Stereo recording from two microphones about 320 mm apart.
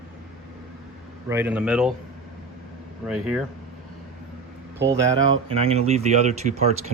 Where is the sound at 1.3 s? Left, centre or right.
Centre.